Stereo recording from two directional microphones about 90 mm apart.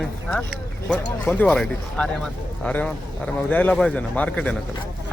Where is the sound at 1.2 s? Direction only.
5° left (ahead or behind).